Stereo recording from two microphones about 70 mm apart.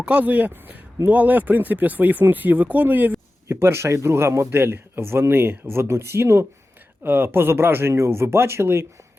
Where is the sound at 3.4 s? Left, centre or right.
Right.